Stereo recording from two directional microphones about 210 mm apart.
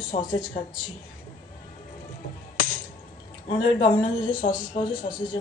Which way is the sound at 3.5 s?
25° left (ahead or behind).